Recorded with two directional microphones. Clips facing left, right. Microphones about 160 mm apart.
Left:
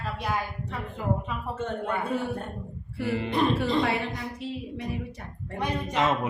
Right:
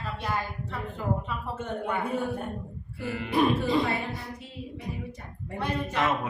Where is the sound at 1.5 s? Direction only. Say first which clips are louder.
Left 2 dB; 10° right (ahead or behind).